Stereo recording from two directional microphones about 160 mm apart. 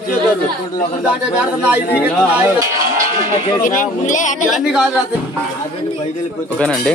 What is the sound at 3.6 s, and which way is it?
Speech, 55° left (ahead or behind).